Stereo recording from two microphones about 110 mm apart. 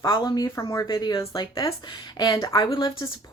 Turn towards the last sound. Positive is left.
turn(degrees=45)  # may be behind; listen again after turning